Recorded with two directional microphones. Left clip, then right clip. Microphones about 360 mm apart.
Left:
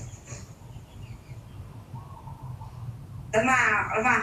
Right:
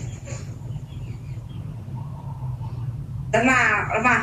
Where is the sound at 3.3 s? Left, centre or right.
Centre.